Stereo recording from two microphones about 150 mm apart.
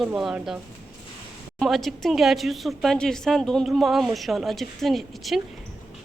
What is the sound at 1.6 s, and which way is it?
Speech, centre (ahead or behind).